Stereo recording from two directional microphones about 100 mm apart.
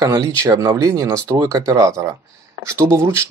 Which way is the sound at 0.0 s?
30° right (ahead or behind).